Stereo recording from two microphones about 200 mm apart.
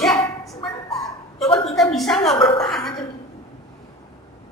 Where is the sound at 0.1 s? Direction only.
15° left (ahead or behind).